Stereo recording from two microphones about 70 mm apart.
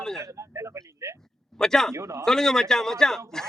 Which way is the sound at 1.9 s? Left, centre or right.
Right.